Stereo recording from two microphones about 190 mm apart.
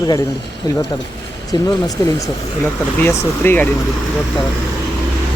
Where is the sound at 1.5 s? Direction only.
20° left (ahead or behind).